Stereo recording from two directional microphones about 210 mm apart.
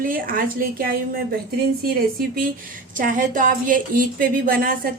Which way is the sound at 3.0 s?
40° right (ahead or behind).